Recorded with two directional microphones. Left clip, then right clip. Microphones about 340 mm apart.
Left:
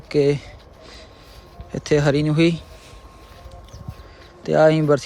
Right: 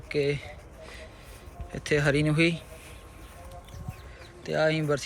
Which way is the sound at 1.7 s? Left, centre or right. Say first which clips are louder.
Left 7 dB; centre.